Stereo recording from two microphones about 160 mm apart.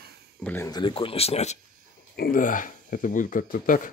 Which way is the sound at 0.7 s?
30° left (ahead or behind).